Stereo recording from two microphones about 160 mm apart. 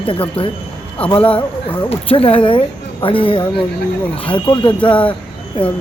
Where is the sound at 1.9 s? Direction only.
35° left (ahead or behind).